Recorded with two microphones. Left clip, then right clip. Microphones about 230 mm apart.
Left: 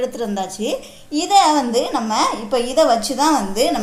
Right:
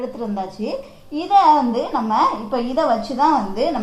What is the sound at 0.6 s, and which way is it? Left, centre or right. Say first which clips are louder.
A woman's voice: left 3 dB; left.